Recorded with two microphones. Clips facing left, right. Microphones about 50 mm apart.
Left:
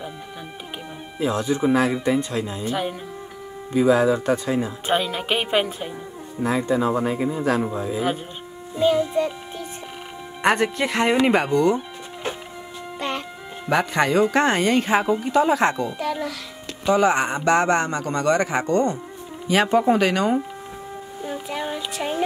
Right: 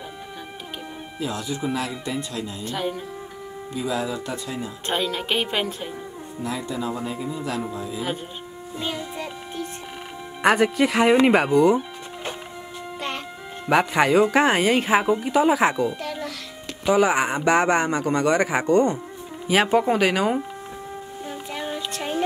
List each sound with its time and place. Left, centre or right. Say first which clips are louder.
1.2 s speech: left 7 dB; left
2.6 s speech: even; centre
3.7 s speech: left 9 dB; left
4.8 s speech: even; centre
6.4 s speech: left 7 dB; left
8.7 s music: left 11 dB; centre
10.4 s speech: right 2 dB; centre
13.7 s speech: right 2 dB; centre
21.2 s a sound: left 4 dB; centre